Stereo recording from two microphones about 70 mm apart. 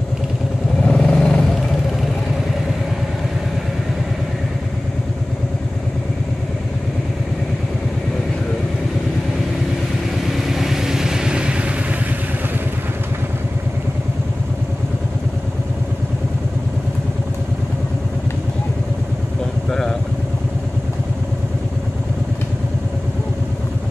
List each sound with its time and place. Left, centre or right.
0.8 s vehicle: centre
10.3 s vehicle: centre